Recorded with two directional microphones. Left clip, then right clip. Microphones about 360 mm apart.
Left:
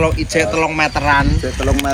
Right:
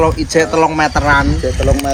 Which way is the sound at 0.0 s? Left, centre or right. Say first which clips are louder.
Right 3 dB; right.